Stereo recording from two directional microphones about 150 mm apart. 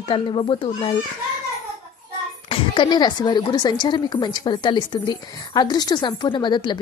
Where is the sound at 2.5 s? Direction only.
30° left (ahead or behind).